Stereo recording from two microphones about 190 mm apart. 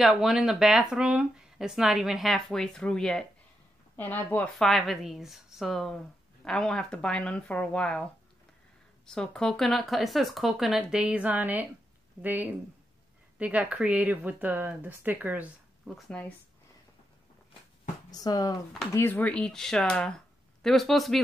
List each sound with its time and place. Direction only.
0.0 s speech: centre (ahead or behind)
9.0 s speech: 5° left (ahead or behind)
18.1 s speech: 20° left (ahead or behind); by 21.2 s centre (ahead or behind)